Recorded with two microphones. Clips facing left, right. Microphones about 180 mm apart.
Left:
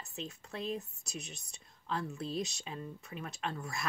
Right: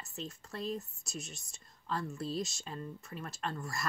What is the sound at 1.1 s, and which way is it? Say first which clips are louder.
Speech: right 1 dB; 60° left (ahead or behind).